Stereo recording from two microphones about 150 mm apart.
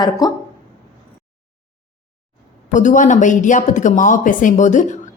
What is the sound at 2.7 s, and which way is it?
Speech, 55° left (ahead or behind).